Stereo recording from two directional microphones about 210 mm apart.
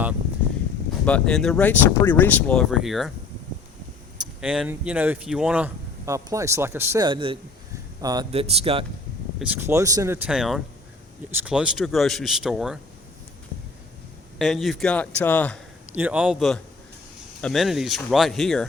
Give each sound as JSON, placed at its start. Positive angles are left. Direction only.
{"t": 1.0, "sound": "speech", "side_deg": 5}
{"t": 4.4, "sound": "speech", "side_deg": -5}
{"t": 9.4, "sound": "speech", "side_deg": -10}
{"t": 14.3, "sound": "speech", "side_deg": 0}
{"t": 15.9, "sound": "speech", "side_deg": -5}